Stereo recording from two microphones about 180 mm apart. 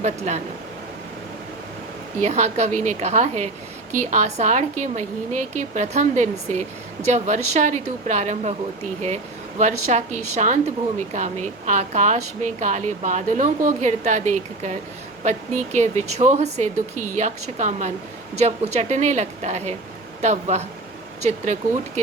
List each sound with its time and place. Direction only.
0.0 s a woman's voice: 40° right (ahead or behind)
2.2 s a woman's voice: 40° right (ahead or behind)